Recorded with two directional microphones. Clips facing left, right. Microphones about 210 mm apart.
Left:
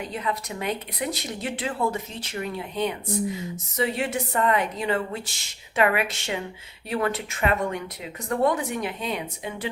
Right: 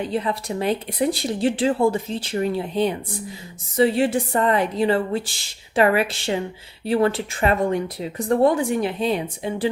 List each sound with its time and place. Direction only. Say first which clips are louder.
0.0 s speech: right 6 dB; 30° right (ahead or behind)